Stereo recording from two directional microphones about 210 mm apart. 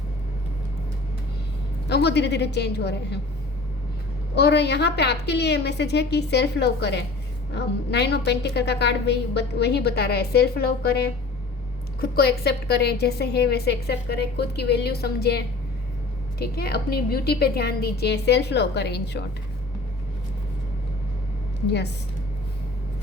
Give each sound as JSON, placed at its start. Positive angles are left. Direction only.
{"t": 1.9, "sound": "a woman's voice", "side_deg": 55}
{"t": 4.4, "sound": "a woman's voice", "side_deg": 50}